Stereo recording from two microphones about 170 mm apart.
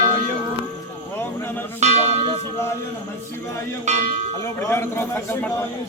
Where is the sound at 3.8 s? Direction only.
40° right (ahead or behind).